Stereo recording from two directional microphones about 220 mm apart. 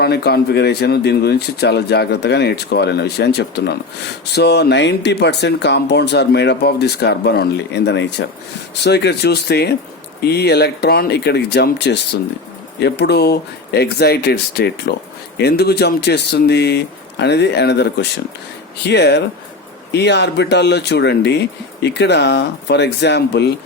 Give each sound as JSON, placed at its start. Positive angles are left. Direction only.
{"t": 0.0, "sound": "speech", "side_deg": 45}